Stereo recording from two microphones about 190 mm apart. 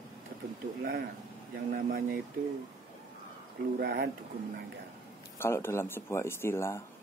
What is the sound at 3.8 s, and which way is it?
Speech, 60° right (ahead or behind).